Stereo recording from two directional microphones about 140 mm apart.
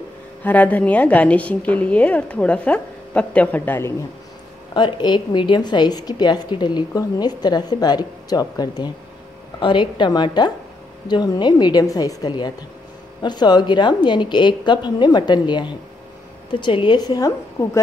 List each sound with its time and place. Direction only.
0.4 s a woman's voice: 10° left (ahead or behind)
4.7 s a woman's voice: 35° left (ahead or behind)